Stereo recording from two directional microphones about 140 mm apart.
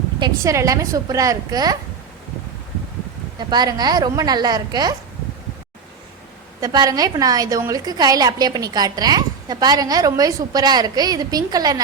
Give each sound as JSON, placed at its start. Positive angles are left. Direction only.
{"t": 0.2, "sound": "a woman's voice", "side_deg": -25}
{"t": 3.3, "sound": "a woman's voice", "side_deg": -30}
{"t": 6.6, "sound": "a woman's voice", "side_deg": -30}